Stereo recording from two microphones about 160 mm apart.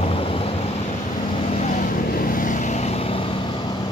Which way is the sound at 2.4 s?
50° left (ahead or behind).